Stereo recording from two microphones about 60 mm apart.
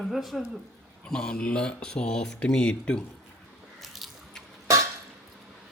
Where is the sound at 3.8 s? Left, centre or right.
Centre.